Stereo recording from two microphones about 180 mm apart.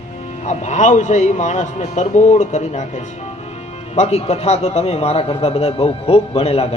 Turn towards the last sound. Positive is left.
turn(degrees=35)  # may be behind; listen again after turning